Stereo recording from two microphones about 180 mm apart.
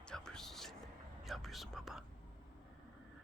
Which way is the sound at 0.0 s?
5° left (ahead or behind).